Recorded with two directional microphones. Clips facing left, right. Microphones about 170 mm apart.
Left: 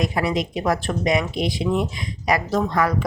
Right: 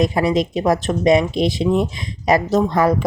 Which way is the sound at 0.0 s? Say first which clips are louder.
Right 5 dB; 25° right (ahead or behind).